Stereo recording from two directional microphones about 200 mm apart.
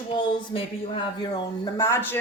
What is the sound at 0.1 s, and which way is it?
Speech, 25° left (ahead or behind).